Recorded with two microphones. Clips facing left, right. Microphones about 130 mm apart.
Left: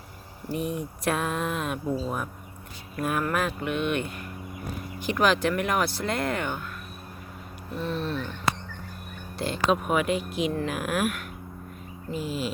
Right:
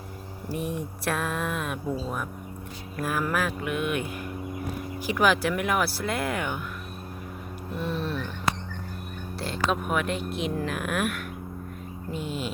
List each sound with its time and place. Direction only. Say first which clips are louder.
0.5 s speech: left 1 dB; centre (ahead or behind)
7.8 s a sound: left 1 dB; 10° right (ahead or behind)
9.4 s speech: left 3 dB; centre (ahead or behind)